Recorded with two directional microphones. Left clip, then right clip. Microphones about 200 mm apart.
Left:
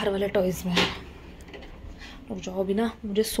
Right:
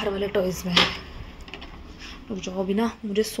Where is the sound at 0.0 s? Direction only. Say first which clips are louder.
Even; 10° left (ahead or behind).